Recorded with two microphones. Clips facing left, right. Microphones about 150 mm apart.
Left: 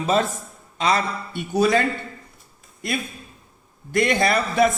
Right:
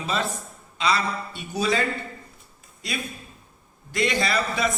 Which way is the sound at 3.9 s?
55° left (ahead or behind).